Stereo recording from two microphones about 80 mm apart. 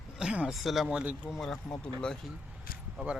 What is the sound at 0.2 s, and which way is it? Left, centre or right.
Speech, centre.